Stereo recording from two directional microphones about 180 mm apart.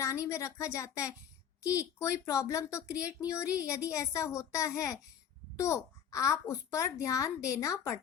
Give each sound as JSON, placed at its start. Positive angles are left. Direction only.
{"t": 0.0, "sound": "a child's voice", "side_deg": 15}